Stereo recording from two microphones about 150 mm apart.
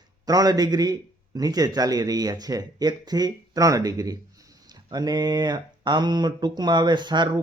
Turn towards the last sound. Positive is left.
turn(degrees=-30)  # may be behind; listen again after turning